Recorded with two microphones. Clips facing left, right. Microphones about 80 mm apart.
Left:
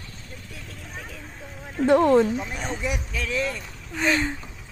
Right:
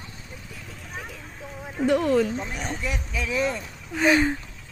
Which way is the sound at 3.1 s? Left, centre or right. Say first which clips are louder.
Right 1 dB; centre.